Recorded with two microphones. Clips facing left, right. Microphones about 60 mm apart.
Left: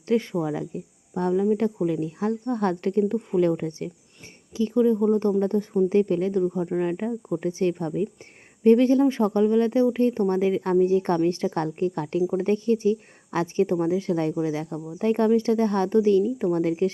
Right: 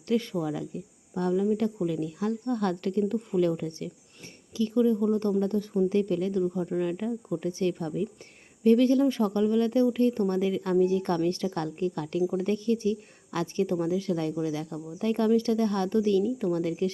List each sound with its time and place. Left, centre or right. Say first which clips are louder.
0.1 s speech: left 4 dB; left